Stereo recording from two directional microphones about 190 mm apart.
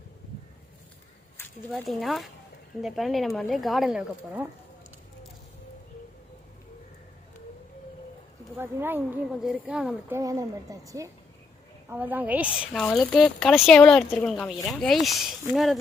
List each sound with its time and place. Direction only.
1.4 s a sound: 10° left (ahead or behind)
1.7 s speech: centre (ahead or behind)
8.5 s speech: 10° right (ahead or behind)
10.2 s speech: 15° right (ahead or behind)
12.7 s speech: 5° left (ahead or behind)